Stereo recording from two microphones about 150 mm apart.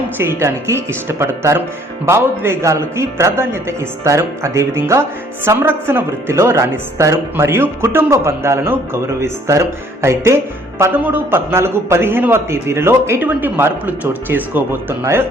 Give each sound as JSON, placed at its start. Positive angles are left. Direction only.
{"t": 0.2, "sound": "a woman's voice", "side_deg": -15}